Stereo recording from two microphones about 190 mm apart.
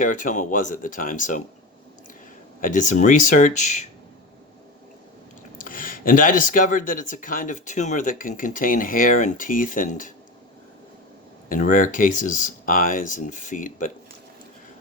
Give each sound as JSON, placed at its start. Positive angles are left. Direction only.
{"t": 0.0, "sound": "speech", "side_deg": 45}
{"t": 2.6, "sound": "speech", "side_deg": 45}
{"t": 5.5, "sound": "speech", "side_deg": 45}
{"t": 11.4, "sound": "speech", "side_deg": 45}